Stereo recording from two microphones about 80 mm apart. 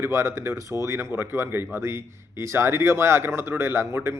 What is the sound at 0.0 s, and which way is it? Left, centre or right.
Speech, right.